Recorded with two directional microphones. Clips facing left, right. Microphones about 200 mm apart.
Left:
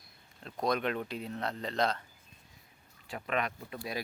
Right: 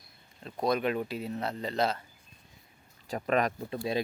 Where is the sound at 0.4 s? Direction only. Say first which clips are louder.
Right 3 dB; 5° right (ahead or behind).